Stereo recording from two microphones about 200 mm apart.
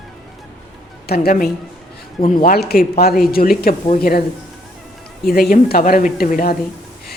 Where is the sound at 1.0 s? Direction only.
50° left (ahead or behind).